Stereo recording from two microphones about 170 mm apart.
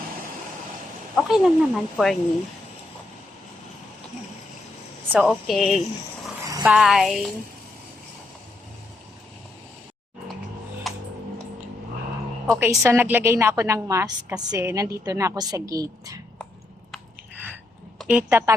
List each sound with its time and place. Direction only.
1.1 s speech: centre (ahead or behind)
5.2 s speech: centre (ahead or behind)
6.4 s a sound: 20° right (ahead or behind)
6.7 s speech: 5° right (ahead or behind)
10.8 s music: centre (ahead or behind)
12.5 s a woman's voice: 15° right (ahead or behind)
17.9 s a woman's voice: 10° right (ahead or behind)